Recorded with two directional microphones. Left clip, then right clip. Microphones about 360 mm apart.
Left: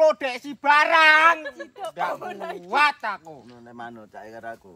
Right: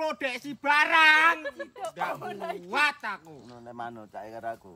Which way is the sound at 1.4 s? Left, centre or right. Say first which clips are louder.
Left 2 dB; right.